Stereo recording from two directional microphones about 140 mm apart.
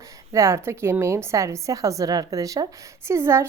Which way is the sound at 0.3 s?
20° right (ahead or behind).